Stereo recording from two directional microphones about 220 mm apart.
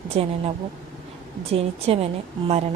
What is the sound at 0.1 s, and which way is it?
Speech, 25° right (ahead or behind).